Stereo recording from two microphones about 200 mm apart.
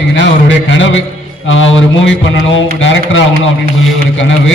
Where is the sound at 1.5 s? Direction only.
70° left (ahead or behind).